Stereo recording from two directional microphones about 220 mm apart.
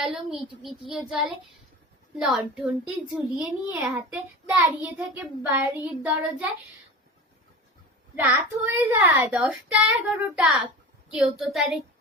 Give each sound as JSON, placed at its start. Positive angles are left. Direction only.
{"t": 0.0, "sound": "a child's voice", "side_deg": 0}
{"t": 8.1, "sound": "a child's voice", "side_deg": -10}